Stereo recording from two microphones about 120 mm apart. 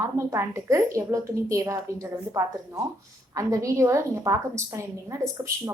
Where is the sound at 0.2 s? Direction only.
25° right (ahead or behind).